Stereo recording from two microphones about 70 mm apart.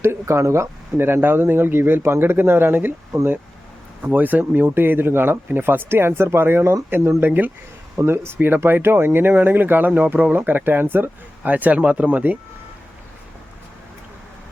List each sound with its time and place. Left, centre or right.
0.0 s speech: right
4.0 s speech: right
7.9 s speech: right